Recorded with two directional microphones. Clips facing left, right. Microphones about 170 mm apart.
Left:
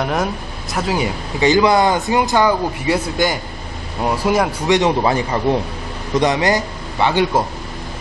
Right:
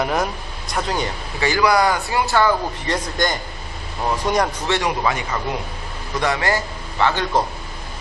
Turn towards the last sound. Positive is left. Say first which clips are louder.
# left 4 dB
turn(degrees=15)  # may be behind; listen again after turning